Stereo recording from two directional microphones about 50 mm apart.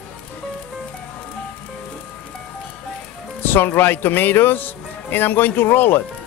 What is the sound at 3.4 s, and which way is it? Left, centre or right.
Speech, left.